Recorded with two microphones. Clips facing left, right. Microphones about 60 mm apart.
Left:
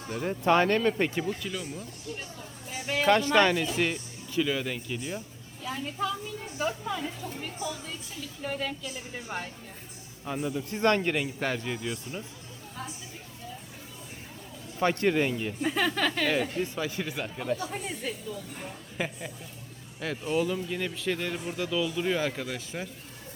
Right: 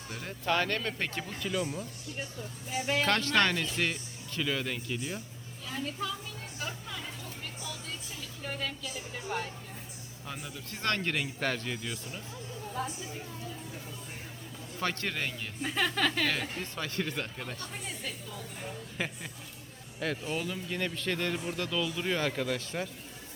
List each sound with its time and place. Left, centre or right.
0.3 s speech: left
0.8 s speech: centre
1.4 s speech: centre
3.1 s speech: centre
5.6 s speech: centre
11.1 s speech: centre
14.8 s speech: centre